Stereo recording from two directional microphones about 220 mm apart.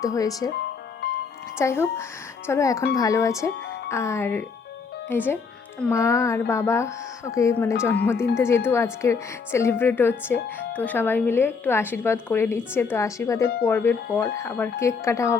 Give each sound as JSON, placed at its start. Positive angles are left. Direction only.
{"t": 0.0, "sound": "speech", "side_deg": 15}
{"t": 1.5, "sound": "speech", "side_deg": 10}